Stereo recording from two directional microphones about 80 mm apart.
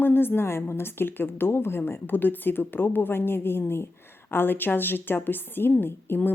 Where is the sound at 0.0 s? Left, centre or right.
Left.